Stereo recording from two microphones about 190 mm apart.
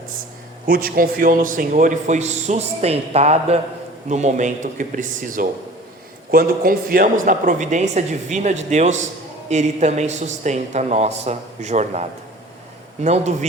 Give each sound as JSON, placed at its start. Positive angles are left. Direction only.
{"t": 0.7, "sound": "a man's voice", "side_deg": -50}